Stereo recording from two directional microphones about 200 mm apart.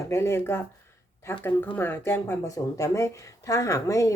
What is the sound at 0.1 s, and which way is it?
Speech, 15° left (ahead or behind).